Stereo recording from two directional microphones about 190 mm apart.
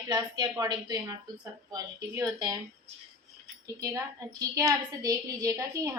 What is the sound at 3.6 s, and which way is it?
A woman's voice, 15° right (ahead or behind).